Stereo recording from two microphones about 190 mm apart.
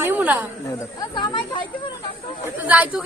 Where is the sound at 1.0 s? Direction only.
25° left (ahead or behind).